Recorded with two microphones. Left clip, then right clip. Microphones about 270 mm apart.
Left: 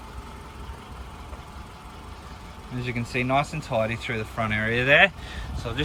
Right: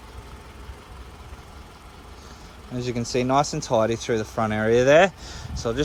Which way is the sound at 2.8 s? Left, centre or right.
Centre.